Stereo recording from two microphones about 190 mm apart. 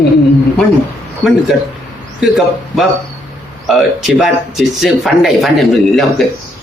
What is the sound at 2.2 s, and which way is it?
Speech, centre (ahead or behind).